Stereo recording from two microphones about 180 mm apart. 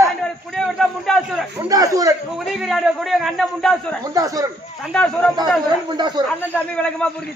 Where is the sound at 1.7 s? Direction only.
20° right (ahead or behind).